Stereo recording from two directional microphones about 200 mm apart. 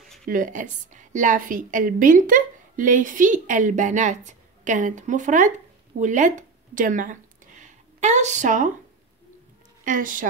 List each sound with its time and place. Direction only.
0.2 s a woman's voice: 45° right (ahead or behind)
9.8 s a woman's voice: 40° right (ahead or behind)